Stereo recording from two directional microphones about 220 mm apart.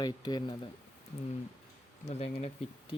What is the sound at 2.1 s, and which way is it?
Speech, 30° left (ahead or behind).